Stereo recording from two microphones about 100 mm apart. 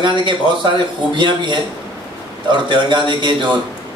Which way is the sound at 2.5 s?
55° right (ahead or behind).